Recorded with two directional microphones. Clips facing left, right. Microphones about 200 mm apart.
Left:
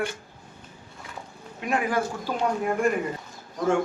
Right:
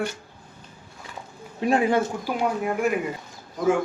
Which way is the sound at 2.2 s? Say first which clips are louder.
Right 1 dB; 10° right (ahead or behind).